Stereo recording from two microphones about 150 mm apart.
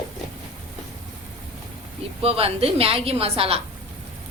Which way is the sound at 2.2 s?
40° right (ahead or behind).